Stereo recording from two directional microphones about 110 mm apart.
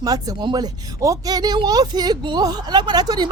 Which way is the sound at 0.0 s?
35° right (ahead or behind).